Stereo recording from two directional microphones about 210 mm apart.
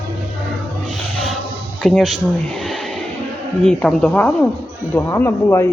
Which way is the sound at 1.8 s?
Centre (ahead or behind).